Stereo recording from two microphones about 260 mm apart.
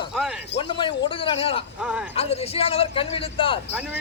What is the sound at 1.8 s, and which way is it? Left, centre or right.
Speech, centre.